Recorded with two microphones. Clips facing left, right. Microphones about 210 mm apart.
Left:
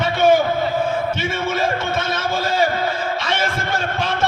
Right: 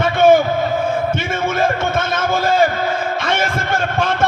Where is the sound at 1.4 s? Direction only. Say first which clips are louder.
Right 4 dB; 50° right (ahead or behind).